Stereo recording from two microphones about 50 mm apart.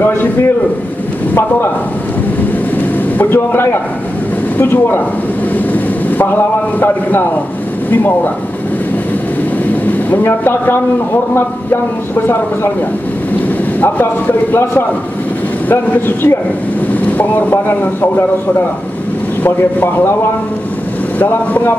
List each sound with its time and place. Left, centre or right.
0.0 s speech: left
3.3 s a man's voice: left
4.6 s a man's voice: left
9.8 s speech: left
13.7 s speech: left
16.9 s speech: left
19.4 s speech: left
21.2 s speech: left